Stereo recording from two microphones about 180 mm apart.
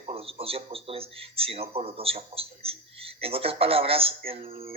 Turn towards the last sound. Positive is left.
turn(degrees=-30)  # may be behind; listen again after turning